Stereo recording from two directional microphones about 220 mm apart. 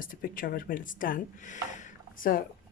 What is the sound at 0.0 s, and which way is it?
Speech, 40° left (ahead or behind).